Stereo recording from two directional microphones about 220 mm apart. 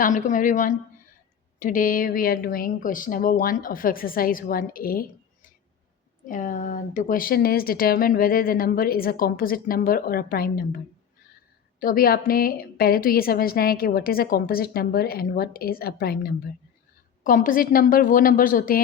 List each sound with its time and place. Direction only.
0.0 s a woman's voice: 35° left (ahead or behind)
6.2 s a woman's voice: 35° left (ahead or behind)
11.8 s a woman's voice: 40° left (ahead or behind)